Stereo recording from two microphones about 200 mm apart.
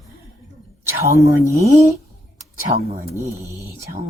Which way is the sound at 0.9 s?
15° right (ahead or behind).